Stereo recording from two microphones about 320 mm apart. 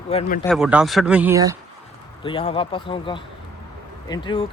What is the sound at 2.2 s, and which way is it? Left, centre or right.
Speech, centre.